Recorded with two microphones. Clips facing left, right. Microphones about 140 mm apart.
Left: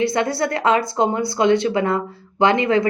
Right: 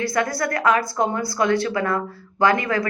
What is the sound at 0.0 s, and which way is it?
Speech, 25° left (ahead or behind).